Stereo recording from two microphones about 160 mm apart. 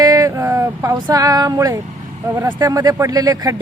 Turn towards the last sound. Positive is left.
turn(degrees=-20)  # may be behind; listen again after turning